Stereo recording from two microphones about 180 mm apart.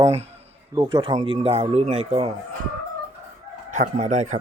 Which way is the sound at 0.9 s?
25° right (ahead or behind).